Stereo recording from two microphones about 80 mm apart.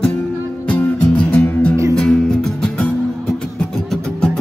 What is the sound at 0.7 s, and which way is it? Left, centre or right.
Music, centre.